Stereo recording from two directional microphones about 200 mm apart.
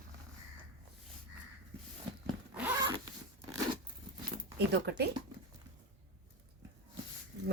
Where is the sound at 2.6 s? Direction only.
5° right (ahead or behind).